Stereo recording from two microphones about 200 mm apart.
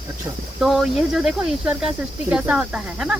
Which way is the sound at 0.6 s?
Centre (ahead or behind).